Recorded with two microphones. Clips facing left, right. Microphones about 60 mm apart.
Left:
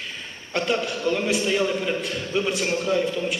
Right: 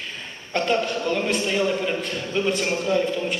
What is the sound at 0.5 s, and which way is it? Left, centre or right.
A man's voice, centre.